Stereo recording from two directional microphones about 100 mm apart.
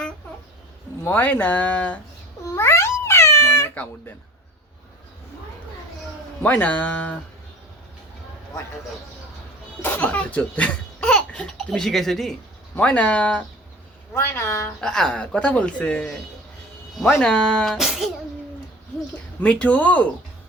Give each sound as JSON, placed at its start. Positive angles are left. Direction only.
{"t": 1.0, "sound": "speech", "side_deg": 20}
{"t": 2.6, "sound": "cat", "side_deg": 30}
{"t": 6.4, "sound": "speech", "side_deg": 15}
{"t": 9.8, "sound": "speech", "side_deg": 15}
{"t": 12.7, "sound": "speech", "side_deg": 15}
{"t": 14.1, "sound": "speech", "side_deg": 25}
{"t": 14.8, "sound": "speech", "side_deg": 5}
{"t": 19.4, "sound": "speech", "side_deg": 15}